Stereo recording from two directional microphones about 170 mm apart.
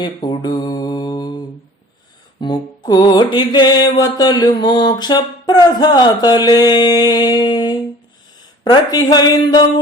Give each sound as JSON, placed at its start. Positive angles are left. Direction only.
{"t": 0.0, "sound": "mantra", "side_deg": 25}
{"t": 2.4, "sound": "mantra", "side_deg": 25}